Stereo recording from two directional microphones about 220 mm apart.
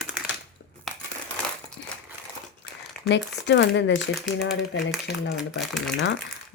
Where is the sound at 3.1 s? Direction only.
50° left (ahead or behind).